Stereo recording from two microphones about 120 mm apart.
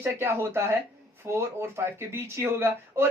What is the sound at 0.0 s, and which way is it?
Speech, 20° right (ahead or behind).